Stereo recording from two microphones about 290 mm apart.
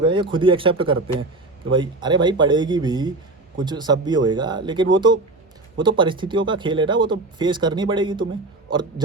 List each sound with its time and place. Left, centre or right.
0.0 s speech: centre